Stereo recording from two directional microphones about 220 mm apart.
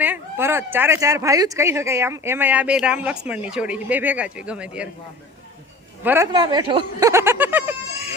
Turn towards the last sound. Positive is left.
turn(degrees=-10)  # may be behind; listen again after turning